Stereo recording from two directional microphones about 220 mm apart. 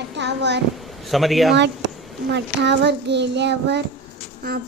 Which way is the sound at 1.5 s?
50° right (ahead or behind).